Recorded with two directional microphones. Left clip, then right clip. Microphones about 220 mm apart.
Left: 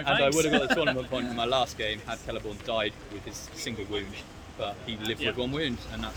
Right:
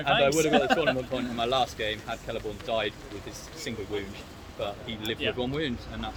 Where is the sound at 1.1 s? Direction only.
15° left (ahead or behind).